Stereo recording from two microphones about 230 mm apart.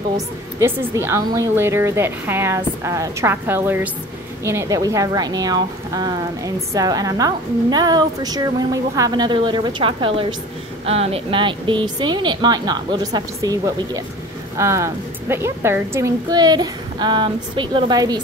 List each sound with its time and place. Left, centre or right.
0.6 s speech: centre